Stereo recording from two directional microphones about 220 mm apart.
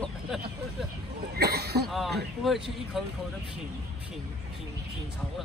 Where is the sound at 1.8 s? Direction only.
Centre (ahead or behind).